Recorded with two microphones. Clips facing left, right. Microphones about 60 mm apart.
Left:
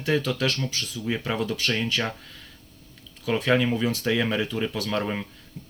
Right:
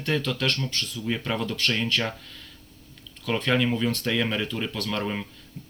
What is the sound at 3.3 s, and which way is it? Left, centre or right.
Speech, centre.